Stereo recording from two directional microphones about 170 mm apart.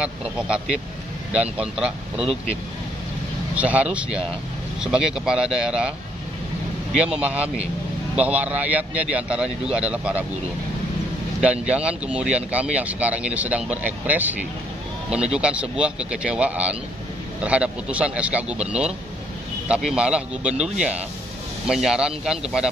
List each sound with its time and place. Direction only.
0.0 s speech: 5° right (ahead or behind)
3.5 s speech: 10° right (ahead or behind)
11.4 s speech: 5° right (ahead or behind)